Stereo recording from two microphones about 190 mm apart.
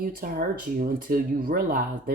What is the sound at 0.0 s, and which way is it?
Speech, 50° right (ahead or behind).